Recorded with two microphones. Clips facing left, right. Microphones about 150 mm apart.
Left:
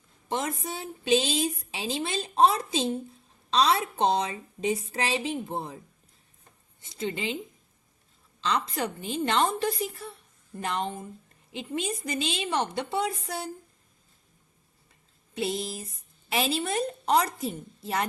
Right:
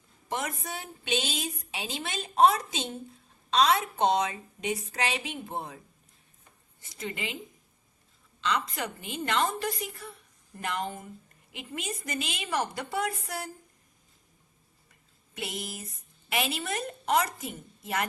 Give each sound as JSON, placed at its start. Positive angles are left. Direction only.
{"t": 0.3, "sound": "a woman's voice", "side_deg": 30}
{"t": 6.8, "sound": "a woman's voice", "side_deg": 25}
{"t": 8.4, "sound": "a woman's voice", "side_deg": 30}
{"t": 15.4, "sound": "a woman's voice", "side_deg": 30}